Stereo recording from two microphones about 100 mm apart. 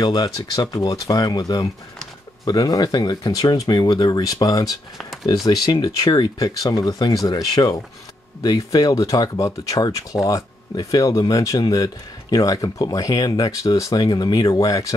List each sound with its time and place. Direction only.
0.0 s speech: 40° left (ahead or behind)
4.9 s speech: centre (ahead or behind)
5.9 s speech: 35° left (ahead or behind)